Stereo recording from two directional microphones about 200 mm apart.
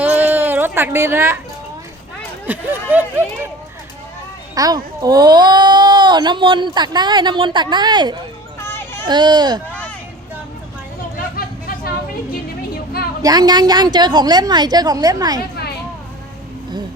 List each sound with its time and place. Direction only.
0.0 s a sound: 10° right (ahead or behind)
2.5 s speech: 10° right (ahead or behind)
4.5 s a child's voice: 20° right (ahead or behind)
8.5 s children playing: 10° left (ahead or behind)
9.0 s a child's voice: 20° right (ahead or behind)
12.7 s a sound: 50° left (ahead or behind)
13.2 s a child's voice: 20° right (ahead or behind)